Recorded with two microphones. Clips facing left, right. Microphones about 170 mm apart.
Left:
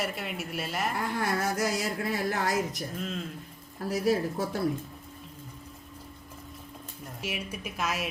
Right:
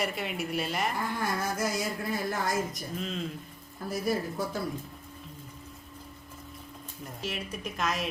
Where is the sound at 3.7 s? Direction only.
75° left (ahead or behind).